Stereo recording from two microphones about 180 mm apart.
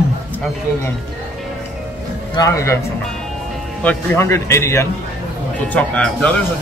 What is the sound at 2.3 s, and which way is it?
Speech, 15° left (ahead or behind).